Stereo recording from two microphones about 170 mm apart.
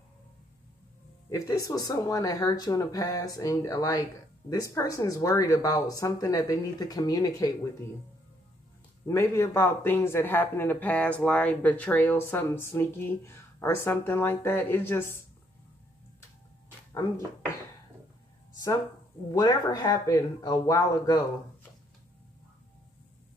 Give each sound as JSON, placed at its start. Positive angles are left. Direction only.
{"t": 1.3, "sound": "speech", "side_deg": 20}
{"t": 9.0, "sound": "speech", "side_deg": 15}
{"t": 19.3, "sound": "speech", "side_deg": 20}